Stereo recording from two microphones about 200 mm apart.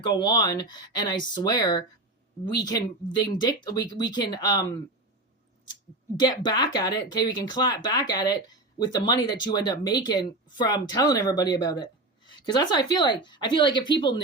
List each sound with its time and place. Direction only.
0.0 s speech: 20° left (ahead or behind)
6.1 s speech: 20° left (ahead or behind)